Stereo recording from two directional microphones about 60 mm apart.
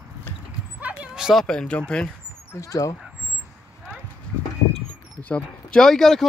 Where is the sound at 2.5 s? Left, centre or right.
Left.